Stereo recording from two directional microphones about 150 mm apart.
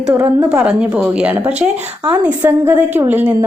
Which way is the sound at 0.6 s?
5° right (ahead or behind).